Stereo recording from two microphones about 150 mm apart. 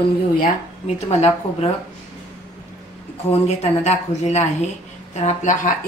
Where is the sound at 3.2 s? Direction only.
45° left (ahead or behind).